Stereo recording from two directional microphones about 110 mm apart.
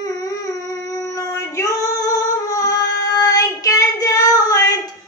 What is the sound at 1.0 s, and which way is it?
Female singing, 30° left (ahead or behind).